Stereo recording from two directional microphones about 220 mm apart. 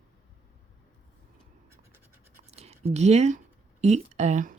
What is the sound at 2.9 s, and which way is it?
Speech, 30° right (ahead or behind).